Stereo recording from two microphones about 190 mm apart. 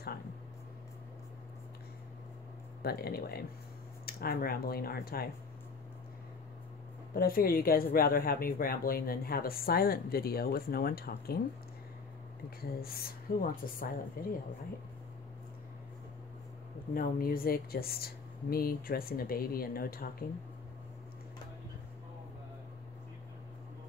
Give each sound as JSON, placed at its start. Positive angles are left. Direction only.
{"t": 2.8, "sound": "speech", "side_deg": 55}
{"t": 7.2, "sound": "speech", "side_deg": 50}
{"t": 12.4, "sound": "speech", "side_deg": 55}
{"t": 16.9, "sound": "speech", "side_deg": 50}